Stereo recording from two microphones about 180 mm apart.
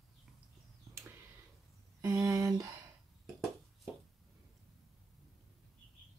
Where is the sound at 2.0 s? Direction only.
20° right (ahead or behind).